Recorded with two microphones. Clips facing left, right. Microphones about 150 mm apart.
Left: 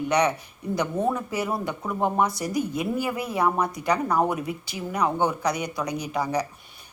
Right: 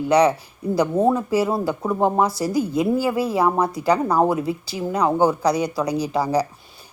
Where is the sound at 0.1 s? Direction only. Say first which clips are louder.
Right 7 dB; 30° right (ahead or behind).